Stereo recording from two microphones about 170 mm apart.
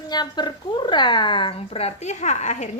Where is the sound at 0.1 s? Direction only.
25° left (ahead or behind).